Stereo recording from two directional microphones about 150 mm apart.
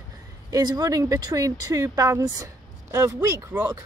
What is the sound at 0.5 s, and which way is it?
Speech, 25° right (ahead or behind).